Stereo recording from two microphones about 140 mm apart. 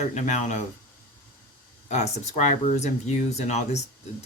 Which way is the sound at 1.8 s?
55° left (ahead or behind).